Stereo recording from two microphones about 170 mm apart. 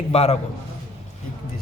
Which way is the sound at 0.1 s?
40° left (ahead or behind).